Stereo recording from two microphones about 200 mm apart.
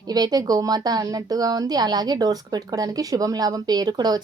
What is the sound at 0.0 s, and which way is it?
A woman's voice, 20° right (ahead or behind).